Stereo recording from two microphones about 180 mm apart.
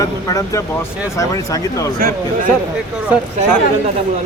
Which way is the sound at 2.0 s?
50° right (ahead or behind).